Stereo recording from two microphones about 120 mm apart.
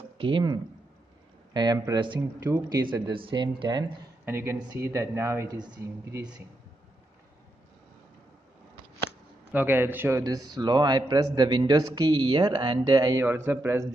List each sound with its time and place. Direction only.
0.2 s a man's voice: 45° right (ahead or behind)
4.3 s a man's voice: 20° right (ahead or behind)
9.5 s a man's voice: 15° right (ahead or behind); by 13.2 s 30° right (ahead or behind)
13.2 s speech: 20° right (ahead or behind)